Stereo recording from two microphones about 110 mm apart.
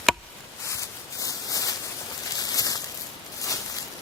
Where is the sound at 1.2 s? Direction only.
30° left (ahead or behind).